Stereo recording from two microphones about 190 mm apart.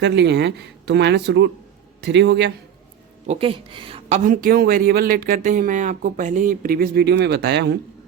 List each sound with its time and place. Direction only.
0.0 s speech: 65° right (ahead or behind)
3.2 s a woman's voice: 30° right (ahead or behind)
4.2 s speech: 45° right (ahead or behind)